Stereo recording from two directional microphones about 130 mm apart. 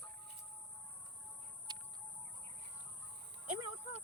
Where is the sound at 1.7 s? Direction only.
35° right (ahead or behind).